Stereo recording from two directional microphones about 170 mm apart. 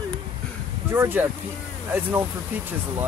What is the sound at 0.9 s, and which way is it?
Speech, 10° right (ahead or behind).